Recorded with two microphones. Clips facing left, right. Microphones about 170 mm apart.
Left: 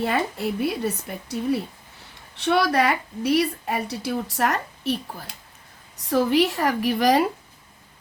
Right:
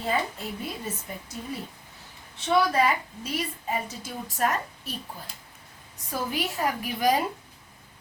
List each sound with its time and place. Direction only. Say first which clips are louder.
0.0 s a woman's voice: left 5 dB; 75° left (ahead or behind)
6.1 s a woman's voice: left 11 dB; 85° left